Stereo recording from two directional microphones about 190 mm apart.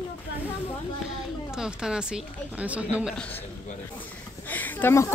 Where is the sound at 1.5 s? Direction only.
5° right (ahead or behind).